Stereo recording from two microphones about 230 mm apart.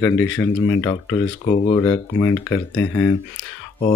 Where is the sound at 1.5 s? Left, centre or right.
Left.